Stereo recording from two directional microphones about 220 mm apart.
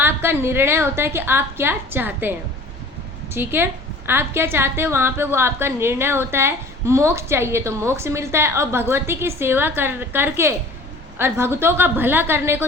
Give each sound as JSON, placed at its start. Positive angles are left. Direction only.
{"t": 0.0, "sound": "a woman's voice", "side_deg": -10}
{"t": 3.3, "sound": "a woman's voice", "side_deg": -10}